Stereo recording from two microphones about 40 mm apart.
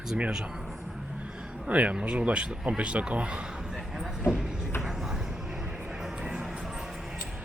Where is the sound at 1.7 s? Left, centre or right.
Right.